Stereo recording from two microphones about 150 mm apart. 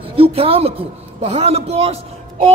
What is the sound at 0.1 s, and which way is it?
A woman's voice, 40° right (ahead or behind).